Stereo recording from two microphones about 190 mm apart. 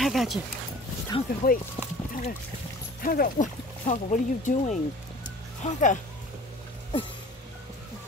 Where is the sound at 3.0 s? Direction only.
45° left (ahead or behind).